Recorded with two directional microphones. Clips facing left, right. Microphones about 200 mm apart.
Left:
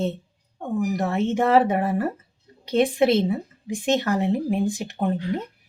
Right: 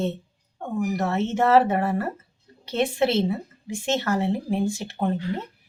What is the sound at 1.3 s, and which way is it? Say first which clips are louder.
A woman's voice: even; 15° left (ahead or behind).